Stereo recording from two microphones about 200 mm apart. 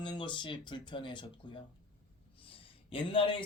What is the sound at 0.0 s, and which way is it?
Speech, 25° left (ahead or behind).